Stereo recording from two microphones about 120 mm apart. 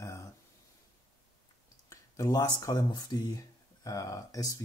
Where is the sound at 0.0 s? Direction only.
25° left (ahead or behind).